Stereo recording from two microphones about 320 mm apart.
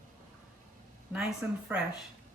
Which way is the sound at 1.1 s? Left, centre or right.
Centre.